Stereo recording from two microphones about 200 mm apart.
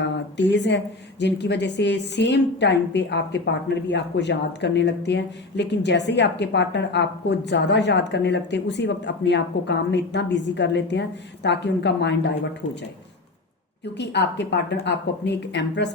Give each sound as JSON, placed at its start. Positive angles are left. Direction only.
{"t": 0.3, "sound": "a woman's voice", "side_deg": 60}
{"t": 13.9, "sound": "a woman's voice", "side_deg": 60}